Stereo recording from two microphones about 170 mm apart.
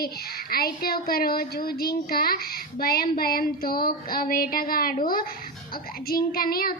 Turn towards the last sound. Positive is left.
turn(degrees=60)  # may be behind; listen again after turning